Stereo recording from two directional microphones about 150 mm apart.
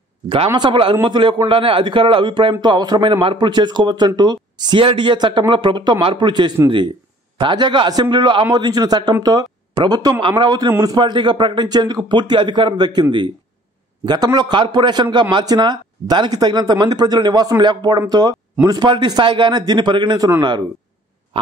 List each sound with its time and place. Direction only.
0.6 s a man's voice: 35° right (ahead or behind)